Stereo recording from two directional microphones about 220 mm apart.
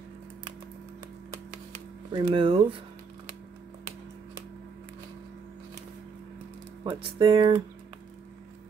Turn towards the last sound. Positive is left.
turn(degrees=-20)  # may be behind; listen again after turning